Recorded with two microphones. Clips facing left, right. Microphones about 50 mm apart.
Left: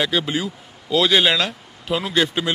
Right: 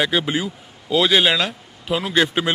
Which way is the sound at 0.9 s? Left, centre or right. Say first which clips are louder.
Even; centre.